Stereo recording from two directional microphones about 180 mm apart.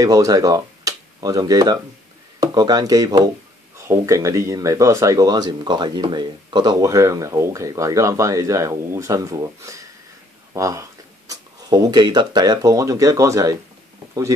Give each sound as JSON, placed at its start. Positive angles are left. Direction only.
{"t": 0.0, "sound": "speech", "side_deg": -20}